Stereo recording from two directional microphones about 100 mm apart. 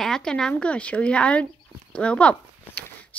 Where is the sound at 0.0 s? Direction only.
5° left (ahead or behind).